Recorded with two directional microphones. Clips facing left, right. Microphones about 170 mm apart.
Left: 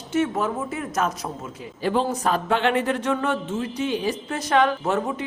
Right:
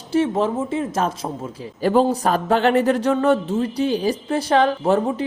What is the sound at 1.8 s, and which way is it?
Speech, 40° right (ahead or behind).